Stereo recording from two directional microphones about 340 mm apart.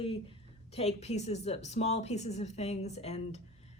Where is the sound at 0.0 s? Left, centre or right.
Centre.